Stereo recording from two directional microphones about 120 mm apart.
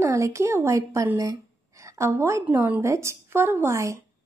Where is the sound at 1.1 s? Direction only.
25° right (ahead or behind).